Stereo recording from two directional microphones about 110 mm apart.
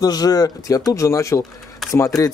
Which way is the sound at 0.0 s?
35° left (ahead or behind).